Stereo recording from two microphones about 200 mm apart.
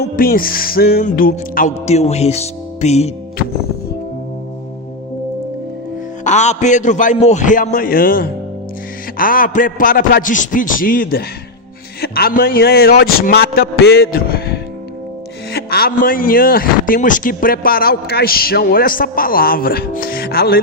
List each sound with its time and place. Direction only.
0.0 s a man's voice: 50° left (ahead or behind)
6.2 s a man's voice: 35° left (ahead or behind); by 20.6 s 50° left (ahead or behind)